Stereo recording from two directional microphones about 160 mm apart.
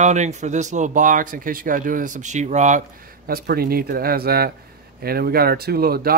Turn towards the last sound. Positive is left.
turn(degrees=-70)  # may be behind; listen again after turning